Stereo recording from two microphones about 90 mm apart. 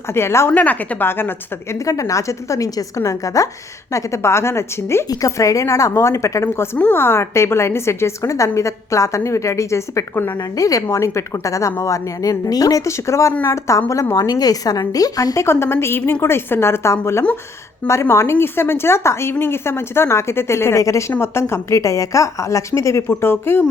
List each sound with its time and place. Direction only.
0.1 s speech: 30° left (ahead or behind)
0.5 s speech: 15° left (ahead or behind)
1.7 s a woman's voice: 35° left (ahead or behind)
10.6 s a woman's voice: 40° left (ahead or behind)
15.4 s a woman's voice: 30° left (ahead or behind)